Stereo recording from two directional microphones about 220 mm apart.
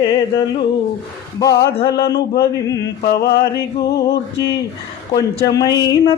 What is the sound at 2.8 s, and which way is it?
Music, 45° left (ahead or behind).